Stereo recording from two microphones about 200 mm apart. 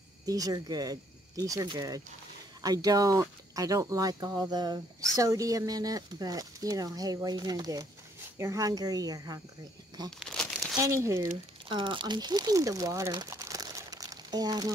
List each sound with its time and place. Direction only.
0.2 s speech: 15° right (ahead or behind)
10.1 s crumpling: 5° left (ahead or behind)
10.8 s speech: 15° right (ahead or behind)
11.7 s speech: 25° right (ahead or behind)